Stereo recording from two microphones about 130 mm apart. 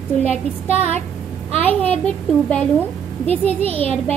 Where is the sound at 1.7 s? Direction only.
10° left (ahead or behind).